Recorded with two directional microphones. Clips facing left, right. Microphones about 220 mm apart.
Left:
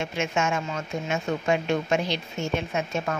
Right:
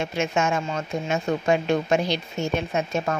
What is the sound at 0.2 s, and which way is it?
A woman's voice, 35° right (ahead or behind).